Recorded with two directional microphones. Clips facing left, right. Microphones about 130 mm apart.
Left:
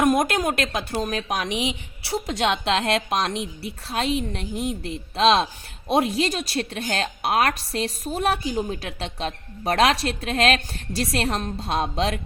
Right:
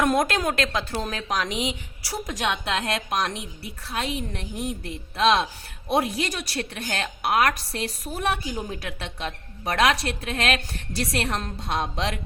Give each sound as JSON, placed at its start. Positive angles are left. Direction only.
{"t": 0.0, "sound": "a woman's voice", "side_deg": 20}